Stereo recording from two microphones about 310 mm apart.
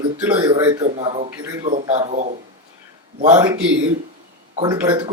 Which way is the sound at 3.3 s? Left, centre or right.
Centre.